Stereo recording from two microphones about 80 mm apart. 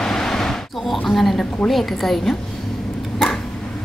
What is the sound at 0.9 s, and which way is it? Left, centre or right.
A woman's voice, centre.